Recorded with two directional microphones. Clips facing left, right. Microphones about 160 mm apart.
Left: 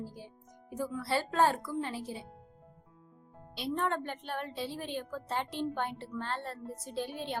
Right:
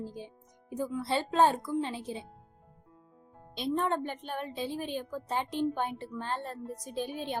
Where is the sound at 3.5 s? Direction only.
20° right (ahead or behind).